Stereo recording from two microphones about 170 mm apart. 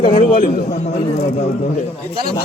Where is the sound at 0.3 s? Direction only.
55° left (ahead or behind).